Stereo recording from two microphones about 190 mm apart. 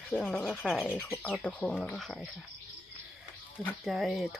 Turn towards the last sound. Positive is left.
turn(degrees=0)  # may be behind; listen again after turning